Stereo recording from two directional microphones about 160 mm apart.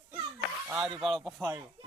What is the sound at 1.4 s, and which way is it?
Speech, 20° right (ahead or behind).